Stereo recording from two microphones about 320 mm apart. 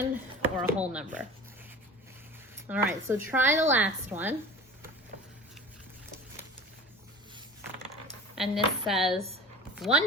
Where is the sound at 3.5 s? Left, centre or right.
Right.